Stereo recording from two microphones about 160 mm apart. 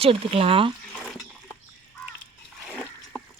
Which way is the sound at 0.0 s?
35° right (ahead or behind).